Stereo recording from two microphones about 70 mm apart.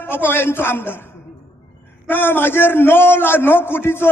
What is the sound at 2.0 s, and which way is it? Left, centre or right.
A man's voice, left.